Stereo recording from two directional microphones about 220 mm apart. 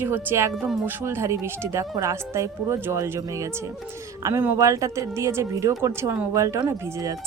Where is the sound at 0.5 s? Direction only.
Centre (ahead or behind).